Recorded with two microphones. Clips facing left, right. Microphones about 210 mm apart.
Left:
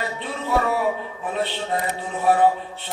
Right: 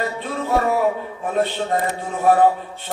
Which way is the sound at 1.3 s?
45° right (ahead or behind).